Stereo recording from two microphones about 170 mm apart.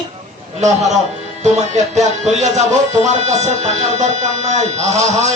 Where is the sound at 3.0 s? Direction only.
40° right (ahead or behind).